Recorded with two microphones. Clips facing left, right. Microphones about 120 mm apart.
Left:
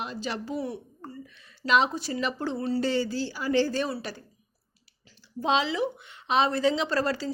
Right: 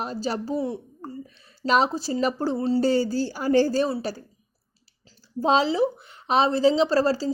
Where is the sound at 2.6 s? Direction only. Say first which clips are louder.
Right 5 dB; 30° right (ahead or behind).